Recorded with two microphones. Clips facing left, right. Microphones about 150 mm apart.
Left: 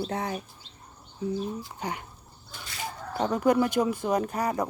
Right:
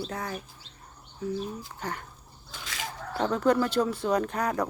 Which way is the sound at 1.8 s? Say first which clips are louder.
Even; 15° left (ahead or behind).